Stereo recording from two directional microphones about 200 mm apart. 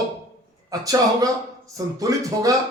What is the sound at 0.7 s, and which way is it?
Speech, 15° right (ahead or behind).